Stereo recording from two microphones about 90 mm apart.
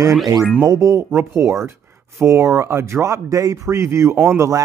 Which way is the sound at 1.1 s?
25° right (ahead or behind).